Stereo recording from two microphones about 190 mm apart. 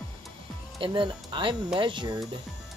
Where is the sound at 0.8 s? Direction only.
25° right (ahead or behind).